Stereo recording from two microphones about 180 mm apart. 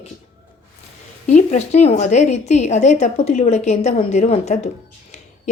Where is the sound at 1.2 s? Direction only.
40° left (ahead or behind).